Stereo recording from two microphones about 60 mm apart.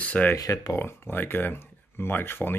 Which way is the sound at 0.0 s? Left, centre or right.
Left.